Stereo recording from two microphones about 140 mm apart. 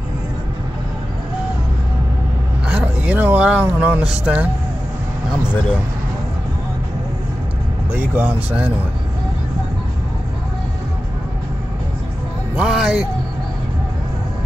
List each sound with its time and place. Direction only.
2.7 s speech: 10° right (ahead or behind)
7.9 s speech: 10° right (ahead or behind)
12.5 s speech: 5° right (ahead or behind)